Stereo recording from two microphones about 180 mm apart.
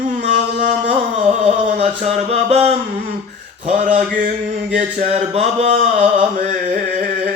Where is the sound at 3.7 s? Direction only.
45° right (ahead or behind).